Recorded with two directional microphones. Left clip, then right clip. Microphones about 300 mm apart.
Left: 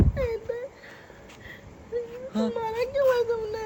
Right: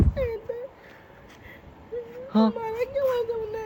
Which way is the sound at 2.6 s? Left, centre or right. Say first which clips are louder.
Left 1 dB; centre.